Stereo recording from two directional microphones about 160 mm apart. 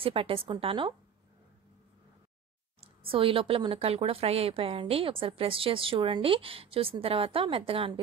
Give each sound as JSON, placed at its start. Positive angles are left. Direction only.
{"t": 0.0, "sound": "a woman's voice", "side_deg": -35}
{"t": 2.8, "sound": "a woman's voice", "side_deg": -35}